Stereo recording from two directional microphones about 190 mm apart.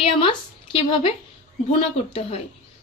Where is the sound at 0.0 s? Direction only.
30° left (ahead or behind).